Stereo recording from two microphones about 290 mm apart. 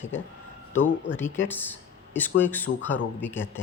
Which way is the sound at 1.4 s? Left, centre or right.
Centre.